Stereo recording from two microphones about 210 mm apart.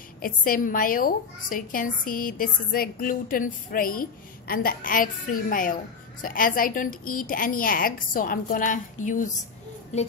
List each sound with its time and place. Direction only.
0.2 s a woman's voice: 40° left (ahead or behind)